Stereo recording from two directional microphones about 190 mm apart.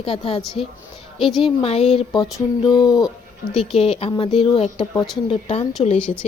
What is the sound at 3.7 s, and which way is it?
A woman's voice, 30° left (ahead or behind).